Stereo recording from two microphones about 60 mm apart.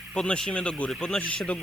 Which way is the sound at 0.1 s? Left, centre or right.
Centre.